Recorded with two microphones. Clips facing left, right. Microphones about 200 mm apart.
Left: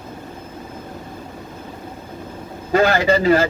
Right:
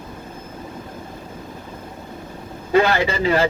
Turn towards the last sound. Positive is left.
turn(degrees=45)  # may be behind; listen again after turning